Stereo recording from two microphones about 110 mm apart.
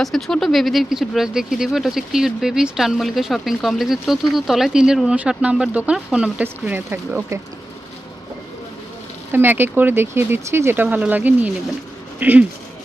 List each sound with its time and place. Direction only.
0.0 s speech: centre (ahead or behind); by 7.3 s 20° right (ahead or behind)
9.3 s speech: 20° right (ahead or behind)